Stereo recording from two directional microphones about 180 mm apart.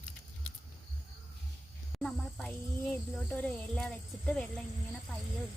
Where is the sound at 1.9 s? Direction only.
5° left (ahead or behind).